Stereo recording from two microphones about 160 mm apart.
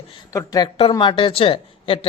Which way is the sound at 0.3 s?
25° left (ahead or behind).